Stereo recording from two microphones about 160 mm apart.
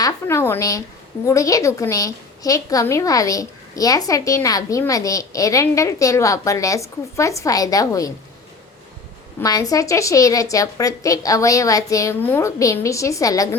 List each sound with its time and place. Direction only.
0.0 s a woman's voice: 20° left (ahead or behind)
9.4 s a woman's voice: 20° left (ahead or behind)